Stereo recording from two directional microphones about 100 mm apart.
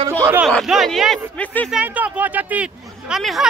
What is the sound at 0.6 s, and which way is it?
Speech, centre (ahead or behind).